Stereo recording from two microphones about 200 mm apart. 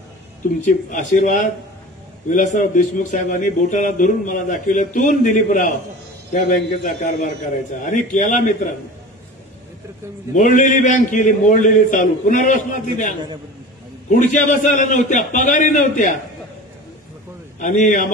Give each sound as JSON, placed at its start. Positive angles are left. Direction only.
{"t": 0.7, "sound": "a man's voice", "side_deg": 40}
{"t": 10.3, "sound": "a man's voice", "side_deg": 40}
{"t": 14.2, "sound": "a man's voice", "side_deg": 35}
{"t": 17.6, "sound": "a man's voice", "side_deg": 40}